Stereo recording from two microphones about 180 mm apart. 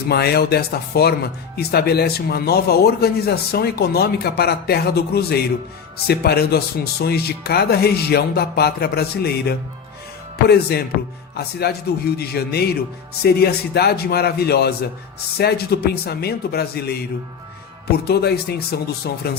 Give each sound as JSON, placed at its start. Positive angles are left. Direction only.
{"t": 0.1, "sound": "speech", "side_deg": 60}